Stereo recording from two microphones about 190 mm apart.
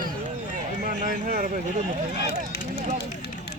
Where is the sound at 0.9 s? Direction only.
50° right (ahead or behind).